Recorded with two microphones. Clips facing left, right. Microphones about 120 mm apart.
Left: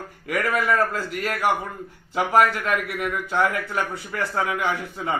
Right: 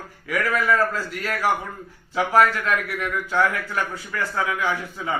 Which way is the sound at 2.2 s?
15° left (ahead or behind).